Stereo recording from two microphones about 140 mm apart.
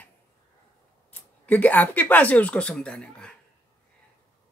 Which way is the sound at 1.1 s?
10° left (ahead or behind).